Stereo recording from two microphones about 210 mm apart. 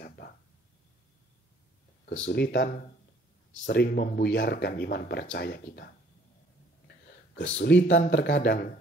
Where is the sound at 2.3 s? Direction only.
50° left (ahead or behind).